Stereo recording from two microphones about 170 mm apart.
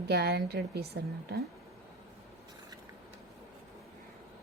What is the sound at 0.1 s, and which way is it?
A woman's voice, 80° right.